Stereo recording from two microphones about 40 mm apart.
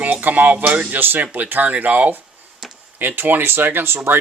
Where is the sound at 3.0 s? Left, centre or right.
Right.